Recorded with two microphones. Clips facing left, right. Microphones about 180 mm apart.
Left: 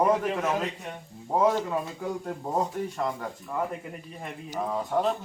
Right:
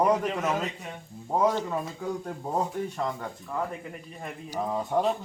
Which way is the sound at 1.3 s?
5° left (ahead or behind).